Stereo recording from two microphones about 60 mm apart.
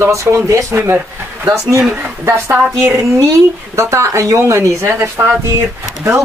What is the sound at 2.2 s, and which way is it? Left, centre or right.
Speech, right.